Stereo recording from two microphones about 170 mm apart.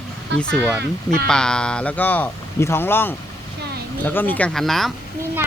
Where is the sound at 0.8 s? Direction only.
70° right (ahead or behind).